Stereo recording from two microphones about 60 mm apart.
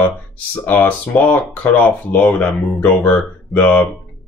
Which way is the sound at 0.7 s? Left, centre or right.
Left.